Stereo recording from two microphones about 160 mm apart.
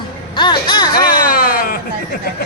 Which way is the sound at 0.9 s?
65° left (ahead or behind).